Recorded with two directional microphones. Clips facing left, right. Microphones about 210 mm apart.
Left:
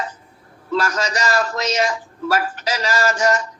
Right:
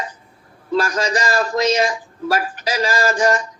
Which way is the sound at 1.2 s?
15° right (ahead or behind).